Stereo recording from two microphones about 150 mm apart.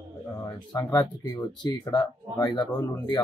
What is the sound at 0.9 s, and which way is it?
Speech, 25° left (ahead or behind).